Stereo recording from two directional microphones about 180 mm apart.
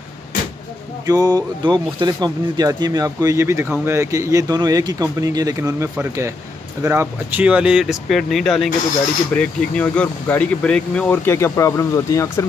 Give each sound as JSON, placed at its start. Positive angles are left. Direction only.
{"t": 1.0, "sound": "speech", "side_deg": -20}